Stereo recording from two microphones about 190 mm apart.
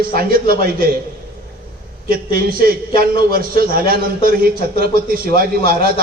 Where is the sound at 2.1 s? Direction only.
50° right (ahead or behind).